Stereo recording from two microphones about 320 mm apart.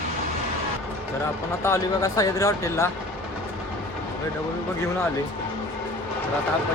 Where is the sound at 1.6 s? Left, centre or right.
Centre.